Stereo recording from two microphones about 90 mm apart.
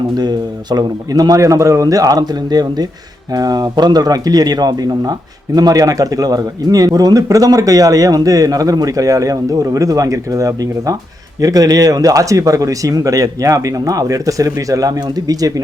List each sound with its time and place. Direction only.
0.2 s a man's voice: 50° right (ahead or behind)